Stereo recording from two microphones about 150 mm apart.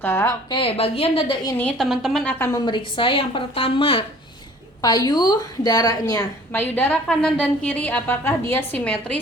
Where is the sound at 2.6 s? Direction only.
30° left (ahead or behind).